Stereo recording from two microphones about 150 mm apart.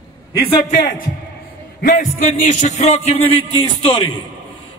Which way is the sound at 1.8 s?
80° left.